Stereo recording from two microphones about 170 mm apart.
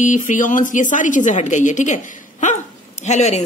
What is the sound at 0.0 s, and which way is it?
A woman's voice, 50° left (ahead or behind).